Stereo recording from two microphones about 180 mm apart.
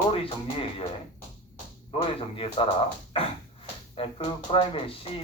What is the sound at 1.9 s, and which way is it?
Speech, 35° left (ahead or behind).